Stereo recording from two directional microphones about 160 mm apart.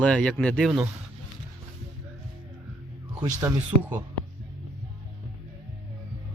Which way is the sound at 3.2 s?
20° right (ahead or behind).